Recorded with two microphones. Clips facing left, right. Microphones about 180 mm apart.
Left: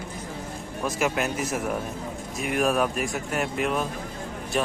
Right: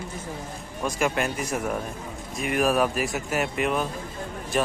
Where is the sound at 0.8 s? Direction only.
5° left (ahead or behind).